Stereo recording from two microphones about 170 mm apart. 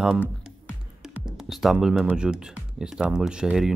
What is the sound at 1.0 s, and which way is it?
Speech, centre (ahead or behind).